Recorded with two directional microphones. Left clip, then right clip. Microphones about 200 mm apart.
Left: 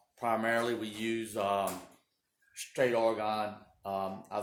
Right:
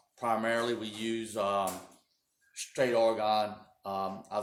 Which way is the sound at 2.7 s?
20° left (ahead or behind).